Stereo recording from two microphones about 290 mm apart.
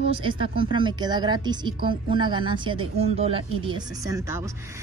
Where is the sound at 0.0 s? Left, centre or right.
Centre.